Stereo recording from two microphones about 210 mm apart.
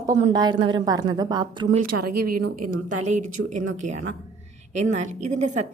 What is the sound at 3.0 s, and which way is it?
A woman's voice, 35° right (ahead or behind).